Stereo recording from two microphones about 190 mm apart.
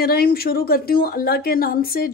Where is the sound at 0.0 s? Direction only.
50° left (ahead or behind).